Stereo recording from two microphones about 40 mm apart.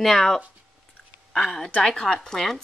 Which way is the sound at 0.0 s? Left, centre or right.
Centre.